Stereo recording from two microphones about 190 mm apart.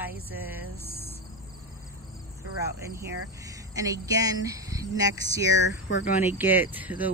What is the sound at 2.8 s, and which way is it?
Speech, 15° right (ahead or behind).